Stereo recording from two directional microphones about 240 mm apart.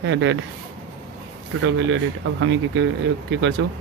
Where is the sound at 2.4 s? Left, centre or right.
Right.